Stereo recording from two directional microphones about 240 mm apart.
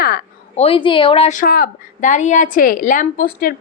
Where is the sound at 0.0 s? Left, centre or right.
Left.